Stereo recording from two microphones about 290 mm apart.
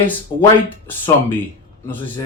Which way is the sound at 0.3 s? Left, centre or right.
Centre.